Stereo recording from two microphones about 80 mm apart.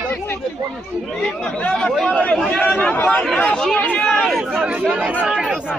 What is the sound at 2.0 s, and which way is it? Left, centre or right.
A man's voice, centre.